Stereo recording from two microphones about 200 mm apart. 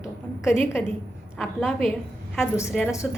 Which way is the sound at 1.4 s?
Centre (ahead or behind).